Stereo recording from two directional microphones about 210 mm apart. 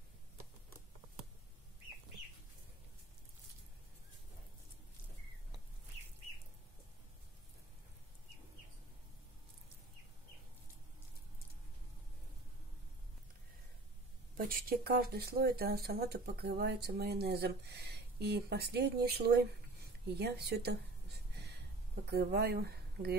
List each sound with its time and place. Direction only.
14.3 s speech: 40° right (ahead or behind)